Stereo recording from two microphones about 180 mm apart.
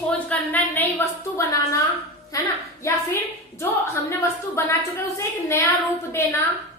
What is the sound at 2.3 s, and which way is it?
Speech, 20° left (ahead or behind).